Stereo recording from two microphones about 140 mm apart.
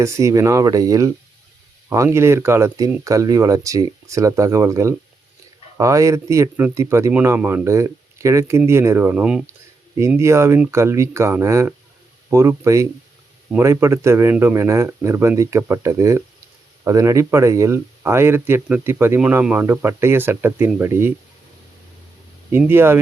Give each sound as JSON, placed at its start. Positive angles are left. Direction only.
{"t": 0.0, "sound": "speech", "side_deg": -20}
{"t": 10.2, "sound": "speech", "side_deg": -20}
{"t": 22.5, "sound": "speech", "side_deg": -15}